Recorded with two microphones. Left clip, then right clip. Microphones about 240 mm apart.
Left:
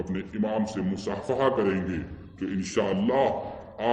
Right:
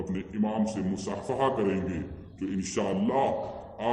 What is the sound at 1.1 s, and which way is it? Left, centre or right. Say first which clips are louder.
Speech: left 3 dB; left.